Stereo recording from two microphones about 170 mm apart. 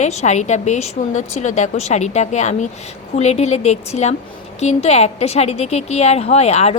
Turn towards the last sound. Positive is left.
turn(degrees=40)  # may be behind; listen again after turning